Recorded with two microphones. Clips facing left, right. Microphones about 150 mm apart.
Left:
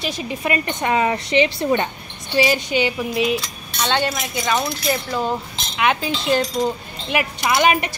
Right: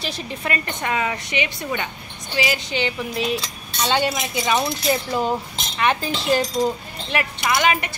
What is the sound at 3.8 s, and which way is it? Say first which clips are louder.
A woman's voice: even; 10° right (ahead or behind).